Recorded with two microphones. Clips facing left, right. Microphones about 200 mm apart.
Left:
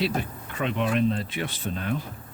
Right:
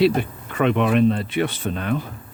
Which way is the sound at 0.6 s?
65° right (ahead or behind).